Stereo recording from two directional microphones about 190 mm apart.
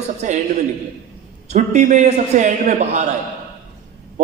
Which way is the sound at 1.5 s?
40° right (ahead or behind).